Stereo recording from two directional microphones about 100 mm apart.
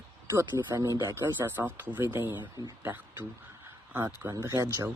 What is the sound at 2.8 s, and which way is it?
Speech, 20° right (ahead or behind).